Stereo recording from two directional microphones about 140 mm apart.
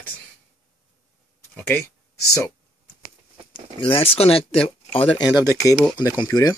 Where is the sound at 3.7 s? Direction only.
40° left (ahead or behind).